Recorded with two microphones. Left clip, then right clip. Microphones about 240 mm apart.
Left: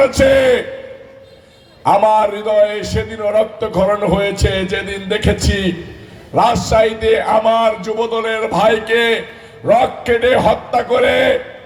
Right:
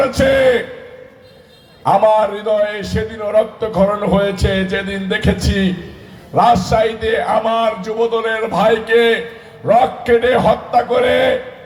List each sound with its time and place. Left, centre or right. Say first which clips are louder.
0.0 s a man's voice: left 2 dB; left
1.8 s a man's voice: even; left